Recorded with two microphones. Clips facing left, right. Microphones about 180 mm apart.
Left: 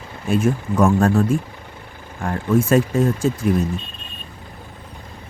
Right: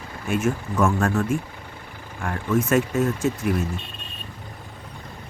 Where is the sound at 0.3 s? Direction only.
35° left (ahead or behind).